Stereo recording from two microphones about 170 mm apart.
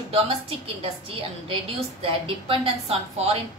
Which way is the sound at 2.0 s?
30° right (ahead or behind).